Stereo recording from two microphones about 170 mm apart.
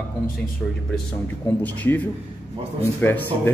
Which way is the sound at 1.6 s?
10° left (ahead or behind).